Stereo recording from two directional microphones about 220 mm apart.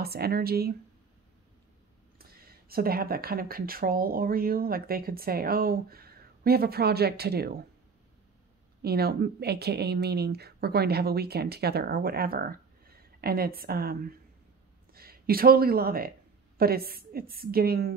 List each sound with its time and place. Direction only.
0.0 s speech: 45° right (ahead or behind)
2.1 s speech: 45° right (ahead or behind)
8.8 s speech: 45° right (ahead or behind)